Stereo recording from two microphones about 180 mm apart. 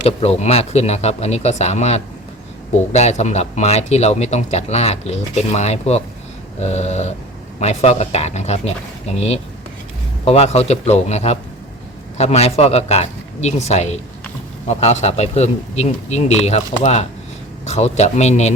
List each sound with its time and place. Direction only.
0.0 s speech: 35° left (ahead or behind)